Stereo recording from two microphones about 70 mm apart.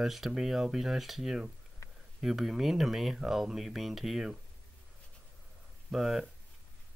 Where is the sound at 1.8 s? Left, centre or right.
Left.